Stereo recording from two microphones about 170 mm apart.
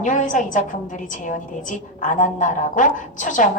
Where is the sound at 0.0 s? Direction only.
45° left (ahead or behind).